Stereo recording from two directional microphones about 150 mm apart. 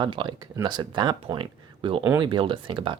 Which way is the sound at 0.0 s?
30° right (ahead or behind).